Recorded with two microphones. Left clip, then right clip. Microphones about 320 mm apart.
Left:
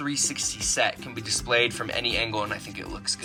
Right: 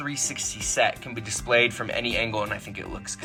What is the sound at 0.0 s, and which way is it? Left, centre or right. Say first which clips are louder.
Speech: left 2 dB; centre.